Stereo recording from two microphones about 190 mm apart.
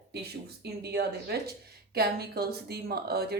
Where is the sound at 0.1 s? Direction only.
55° right (ahead or behind).